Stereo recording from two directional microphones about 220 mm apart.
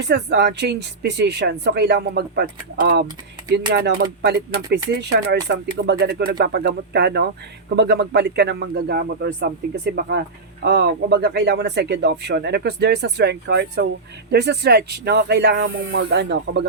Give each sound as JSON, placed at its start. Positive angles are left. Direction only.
{"t": 0.0, "sound": "speech", "side_deg": -50}